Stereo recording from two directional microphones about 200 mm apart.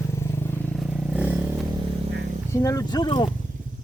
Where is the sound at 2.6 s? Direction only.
15° left (ahead or behind).